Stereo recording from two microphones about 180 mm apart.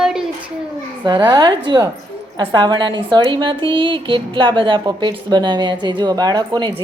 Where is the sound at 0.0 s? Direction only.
5° right (ahead or behind).